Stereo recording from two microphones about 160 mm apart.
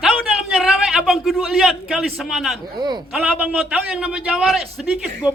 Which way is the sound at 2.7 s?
25° right (ahead or behind).